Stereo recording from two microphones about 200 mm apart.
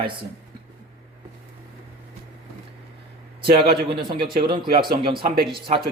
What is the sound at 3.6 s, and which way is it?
A man's voice, 25° right (ahead or behind).